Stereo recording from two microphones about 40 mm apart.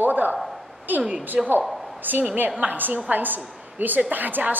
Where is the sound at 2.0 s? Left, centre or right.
Right.